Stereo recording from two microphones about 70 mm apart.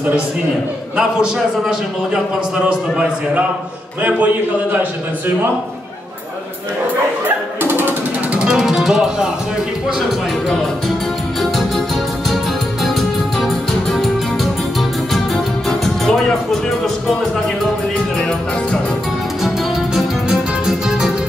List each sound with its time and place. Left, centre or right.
0.9 s a man's voice: centre
7.2 s a sound: right
8.4 s music: centre
13.4 s music: centre
20.0 s music: centre